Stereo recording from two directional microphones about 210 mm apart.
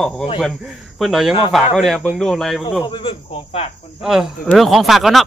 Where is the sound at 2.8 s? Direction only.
25° left (ahead or behind).